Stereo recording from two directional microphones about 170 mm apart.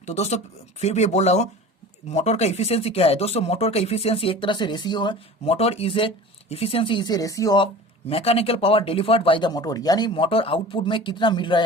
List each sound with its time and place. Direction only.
0.0 s speech: 40° left (ahead or behind); by 7.7 s 25° left (ahead or behind)
8.1 s speech: 35° left (ahead or behind)